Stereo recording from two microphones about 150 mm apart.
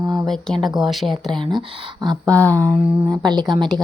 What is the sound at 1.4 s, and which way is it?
Speech, 35° right (ahead or behind).